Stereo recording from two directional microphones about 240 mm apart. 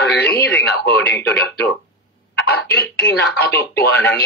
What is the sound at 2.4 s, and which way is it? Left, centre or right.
Speech, left.